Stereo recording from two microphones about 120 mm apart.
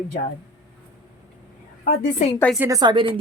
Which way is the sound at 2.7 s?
35° right (ahead or behind).